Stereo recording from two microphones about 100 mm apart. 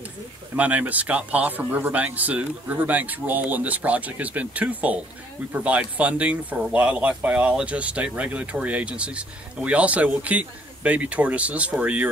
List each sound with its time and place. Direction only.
0.6 s speech: 15° right (ahead or behind)